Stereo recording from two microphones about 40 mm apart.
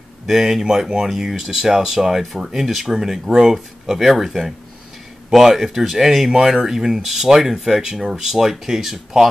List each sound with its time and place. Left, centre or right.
0.3 s speech: centre